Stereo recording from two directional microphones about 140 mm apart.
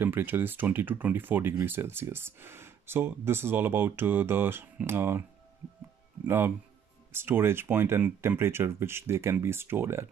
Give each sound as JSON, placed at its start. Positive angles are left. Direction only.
{"t": 0.0, "sound": "speech", "side_deg": -15}
{"t": 6.2, "sound": "speech", "side_deg": -15}